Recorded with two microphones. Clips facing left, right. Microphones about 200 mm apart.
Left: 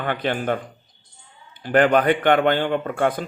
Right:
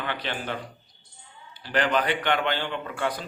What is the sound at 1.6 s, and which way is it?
A man's voice, 50° left (ahead or behind).